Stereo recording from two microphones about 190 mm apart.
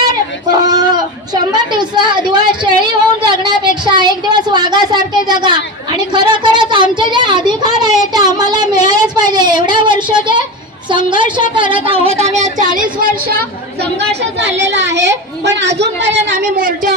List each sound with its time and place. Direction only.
0.6 s a sound: 20° right (ahead or behind)
3.8 s a child's voice: 20° right (ahead or behind)
12.4 s a woman's voice: 40° right (ahead or behind)
14.0 s a woman's voice: 65° right (ahead or behind)
16.0 s speech: 40° right (ahead or behind)